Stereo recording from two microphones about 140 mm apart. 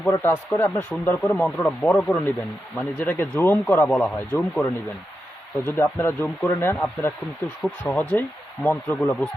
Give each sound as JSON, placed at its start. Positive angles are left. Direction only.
{"t": 0.1, "sound": "speech", "side_deg": 15}
{"t": 7.6, "sound": "speech", "side_deg": 0}
{"t": 8.1, "sound": "speech", "side_deg": 15}